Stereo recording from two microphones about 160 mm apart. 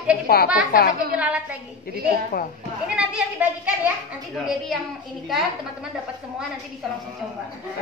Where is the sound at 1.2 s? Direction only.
10° right (ahead or behind).